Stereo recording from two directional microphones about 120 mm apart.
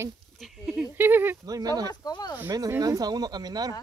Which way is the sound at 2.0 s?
35° left (ahead or behind).